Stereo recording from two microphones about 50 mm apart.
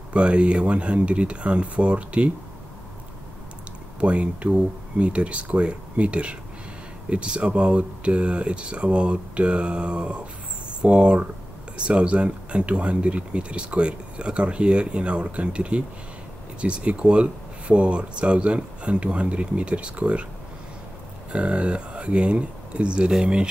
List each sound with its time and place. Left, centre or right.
0.1 s speech: right
4.0 s speech: right
21.3 s speech: right